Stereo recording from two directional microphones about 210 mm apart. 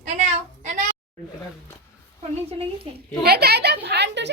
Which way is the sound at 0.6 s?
35° right (ahead or behind).